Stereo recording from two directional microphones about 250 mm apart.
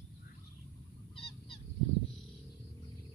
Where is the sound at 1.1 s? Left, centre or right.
Left.